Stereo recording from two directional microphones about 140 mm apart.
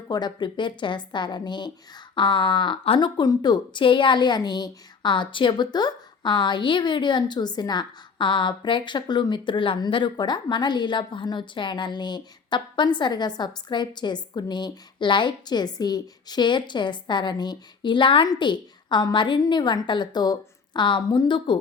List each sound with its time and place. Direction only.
0.1 s a woman's voice: 30° left (ahead or behind)